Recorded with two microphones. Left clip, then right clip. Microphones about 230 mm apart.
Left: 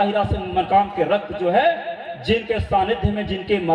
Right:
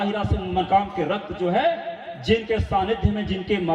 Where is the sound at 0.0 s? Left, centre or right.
Left.